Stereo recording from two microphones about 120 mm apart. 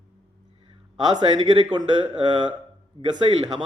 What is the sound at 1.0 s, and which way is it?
A man's voice, 35° right (ahead or behind).